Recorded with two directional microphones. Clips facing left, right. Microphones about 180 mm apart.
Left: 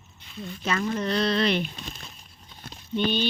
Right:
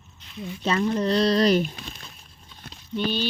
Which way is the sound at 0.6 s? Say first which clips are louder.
Right 4 dB; 30° right (ahead or behind).